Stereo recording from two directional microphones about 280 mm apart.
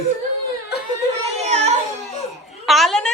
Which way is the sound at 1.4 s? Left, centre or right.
Right.